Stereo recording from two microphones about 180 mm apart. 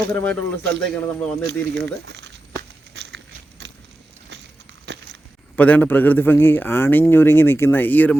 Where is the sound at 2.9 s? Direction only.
75° right (ahead or behind).